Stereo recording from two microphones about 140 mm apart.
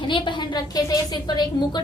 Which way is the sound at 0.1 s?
30° left (ahead or behind).